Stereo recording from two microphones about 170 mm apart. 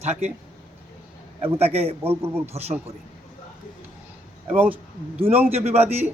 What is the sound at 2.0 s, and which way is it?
Speech, 15° right (ahead or behind).